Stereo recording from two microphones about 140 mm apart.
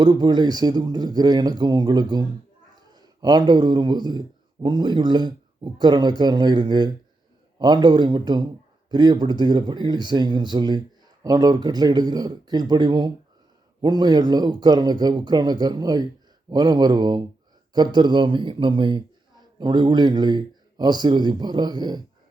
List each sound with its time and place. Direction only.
0.0 s a man's voice: 30° right (ahead or behind)